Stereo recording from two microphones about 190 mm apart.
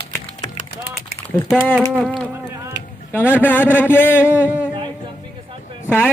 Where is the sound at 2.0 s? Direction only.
5° left (ahead or behind).